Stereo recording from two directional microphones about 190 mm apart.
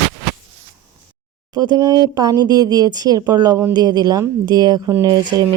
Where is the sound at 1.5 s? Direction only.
20° right (ahead or behind).